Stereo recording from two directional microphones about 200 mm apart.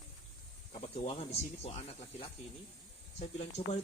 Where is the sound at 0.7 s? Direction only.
30° left (ahead or behind).